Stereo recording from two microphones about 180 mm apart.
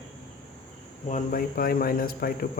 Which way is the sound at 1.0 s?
50° left (ahead or behind).